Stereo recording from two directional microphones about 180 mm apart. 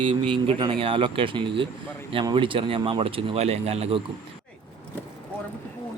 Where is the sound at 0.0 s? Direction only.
30° right (ahead or behind).